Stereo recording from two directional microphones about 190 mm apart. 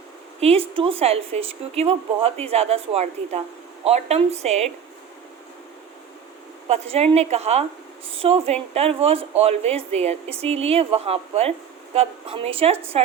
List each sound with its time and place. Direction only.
0.3 s speech: 30° right (ahead or behind)
6.7 s speech: 35° right (ahead or behind)